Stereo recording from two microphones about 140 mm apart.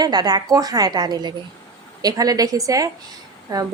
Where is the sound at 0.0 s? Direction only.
30° right (ahead or behind).